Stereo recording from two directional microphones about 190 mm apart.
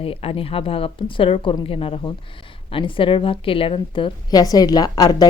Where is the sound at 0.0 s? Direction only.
30° left (ahead or behind).